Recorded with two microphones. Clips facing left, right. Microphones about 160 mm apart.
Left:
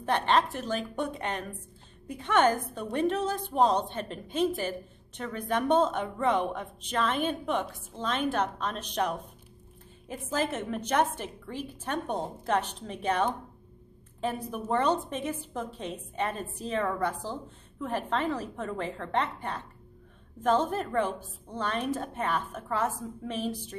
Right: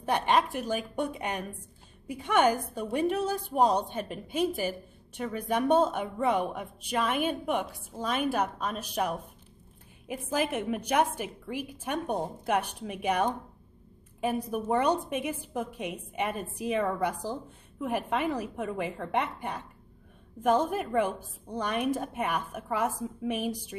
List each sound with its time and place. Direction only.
0.0 s a woman's voice: 10° right (ahead or behind)